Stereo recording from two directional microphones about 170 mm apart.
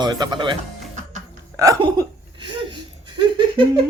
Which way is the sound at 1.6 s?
20° right (ahead or behind).